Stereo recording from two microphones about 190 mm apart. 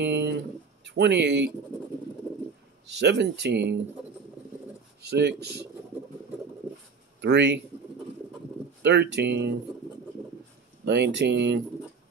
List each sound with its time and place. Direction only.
0.0 s a sound: 65° right (ahead or behind)
0.8 s speech: 65° right (ahead or behind)
2.9 s speech: 65° right (ahead or behind)
5.0 s speech: 60° right (ahead or behind)
7.2 s speech: 65° right (ahead or behind)
8.8 s speech: 60° right (ahead or behind)
10.9 s speech: 65° right (ahead or behind)